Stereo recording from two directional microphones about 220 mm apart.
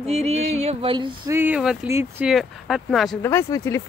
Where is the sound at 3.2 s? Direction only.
10° left (ahead or behind).